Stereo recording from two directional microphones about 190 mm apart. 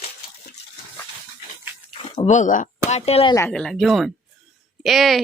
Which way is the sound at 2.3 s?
40° left (ahead or behind).